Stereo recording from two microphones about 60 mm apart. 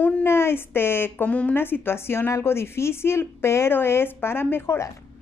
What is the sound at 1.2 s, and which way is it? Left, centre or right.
Speech, left.